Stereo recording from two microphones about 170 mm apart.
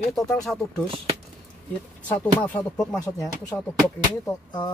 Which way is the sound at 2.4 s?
10° left (ahead or behind).